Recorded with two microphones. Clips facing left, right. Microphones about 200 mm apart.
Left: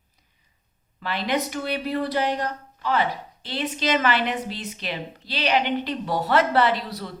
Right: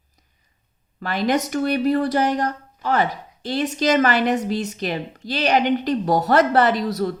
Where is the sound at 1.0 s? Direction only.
45° right (ahead or behind).